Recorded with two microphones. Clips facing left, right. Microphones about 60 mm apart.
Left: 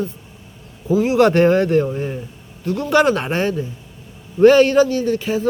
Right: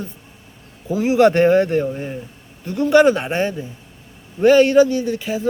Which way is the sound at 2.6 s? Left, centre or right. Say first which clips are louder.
Right 1 dB; right.